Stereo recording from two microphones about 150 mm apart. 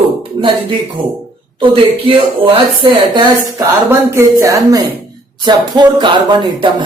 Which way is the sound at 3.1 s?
25° right (ahead or behind).